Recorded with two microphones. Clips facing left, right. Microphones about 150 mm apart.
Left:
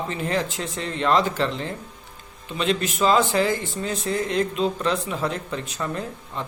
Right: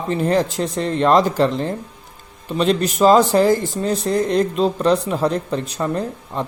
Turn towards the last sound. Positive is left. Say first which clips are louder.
# right 7 dB
turn(degrees=-35)  # may be behind; listen again after turning